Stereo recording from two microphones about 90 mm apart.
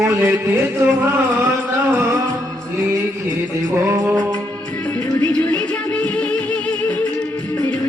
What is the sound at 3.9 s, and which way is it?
Music, 35° right (ahead or behind).